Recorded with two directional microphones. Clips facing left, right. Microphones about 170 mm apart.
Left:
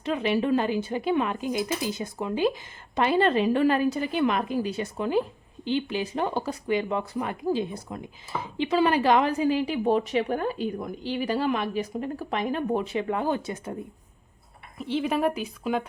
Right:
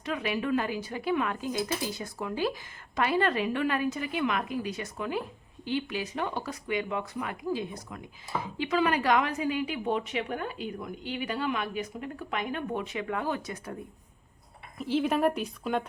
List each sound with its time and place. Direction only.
0.0 s speech: 25° left (ahead or behind)
14.8 s a woman's voice: centre (ahead or behind)